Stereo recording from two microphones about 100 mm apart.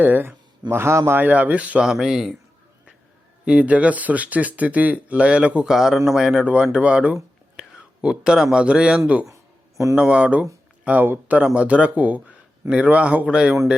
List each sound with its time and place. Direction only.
0.0 s speech: 20° right (ahead or behind); by 2.3 s 5° right (ahead or behind)
3.4 s speech: 10° right (ahead or behind)
9.2 s a sound: 30° right (ahead or behind)
9.9 s speech: 10° right (ahead or behind)